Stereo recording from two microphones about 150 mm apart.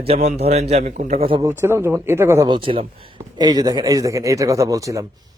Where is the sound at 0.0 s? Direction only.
45° right (ahead or behind).